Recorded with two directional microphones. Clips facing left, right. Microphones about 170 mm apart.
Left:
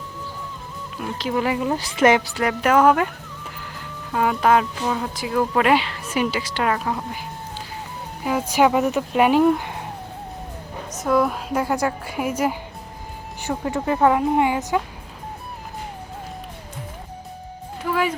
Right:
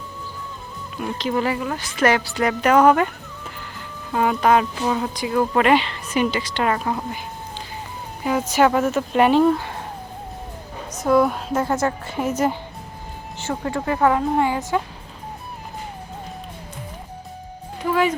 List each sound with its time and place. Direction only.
0.9 s a woman's voice: centre (ahead or behind)
1.6 s speech: 20° left (ahead or behind)
2.3 s speech: 5° left (ahead or behind)
4.1 s speech: centre (ahead or behind)
8.2 s a woman's voice: 5° left (ahead or behind)
11.0 s a woman's voice: centre (ahead or behind)
13.7 s speech: 20° left (ahead or behind)